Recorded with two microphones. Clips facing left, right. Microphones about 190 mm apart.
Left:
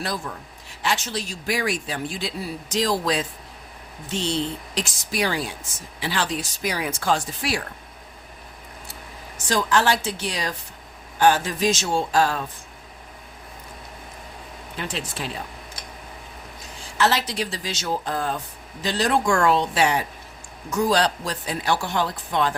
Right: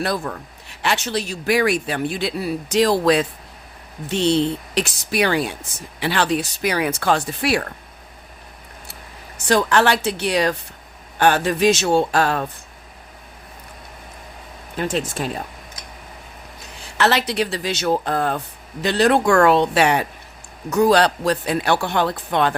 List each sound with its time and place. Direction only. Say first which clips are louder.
0.0 s speech: right 6 dB; 65° right (ahead or behind)
9.4 s speech: right 5 dB; 65° right (ahead or behind)
14.8 s speech: right 8 dB; 45° right (ahead or behind)
16.8 s speech: right 3 dB; 65° right (ahead or behind)